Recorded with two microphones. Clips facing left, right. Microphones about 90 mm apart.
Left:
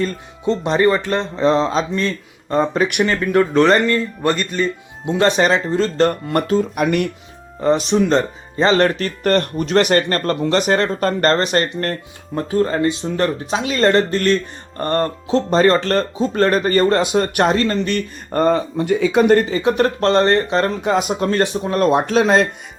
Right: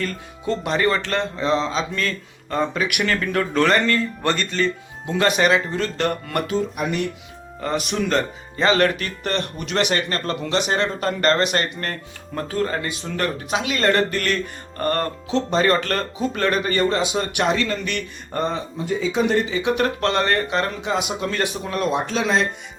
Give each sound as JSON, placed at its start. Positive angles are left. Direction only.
{"t": 0.0, "sound": "speech", "side_deg": 20}
{"t": 1.4, "sound": "speech", "side_deg": 35}
{"t": 1.9, "sound": "speech", "side_deg": 20}
{"t": 2.7, "sound": "speech", "side_deg": 35}
{"t": 3.0, "sound": "speech", "side_deg": 20}
{"t": 6.7, "sound": "speech", "side_deg": 65}
{"t": 7.6, "sound": "speech", "side_deg": 25}
{"t": 12.3, "sound": "speech", "side_deg": 20}
{"t": 18.4, "sound": "speech", "side_deg": 65}
{"t": 20.8, "sound": "speech", "side_deg": 45}
{"t": 21.8, "sound": "speech", "side_deg": 50}